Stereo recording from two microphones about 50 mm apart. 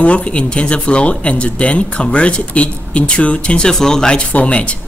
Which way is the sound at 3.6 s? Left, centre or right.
Centre.